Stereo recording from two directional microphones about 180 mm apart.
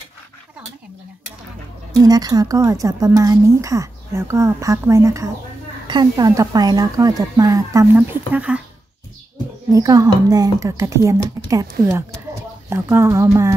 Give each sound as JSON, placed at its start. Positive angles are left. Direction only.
{"t": 2.0, "sound": "speech", "side_deg": -20}
{"t": 9.7, "sound": "speech", "side_deg": -20}
{"t": 12.6, "sound": "speech", "side_deg": -15}